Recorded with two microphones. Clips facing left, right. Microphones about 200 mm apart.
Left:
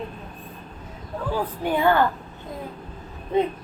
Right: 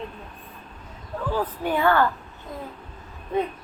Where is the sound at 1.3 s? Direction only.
15° left (ahead or behind).